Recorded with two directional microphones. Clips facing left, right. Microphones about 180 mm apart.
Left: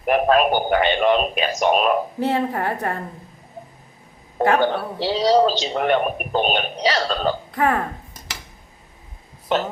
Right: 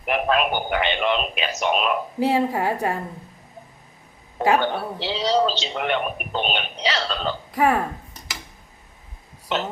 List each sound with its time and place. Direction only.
0.0 s a man's voice: 40° left (ahead or behind)
2.1 s a woman's voice: 10° right (ahead or behind)
4.4 s a man's voice: 40° left (ahead or behind)
7.5 s a woman's voice: 10° right (ahead or behind)
9.5 s a man's voice: 45° left (ahead or behind)